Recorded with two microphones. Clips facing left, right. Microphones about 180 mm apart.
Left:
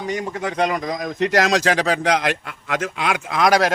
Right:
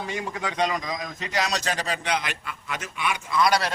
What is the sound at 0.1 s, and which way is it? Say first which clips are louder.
A man's voice: left 6 dB; 45° left (ahead or behind).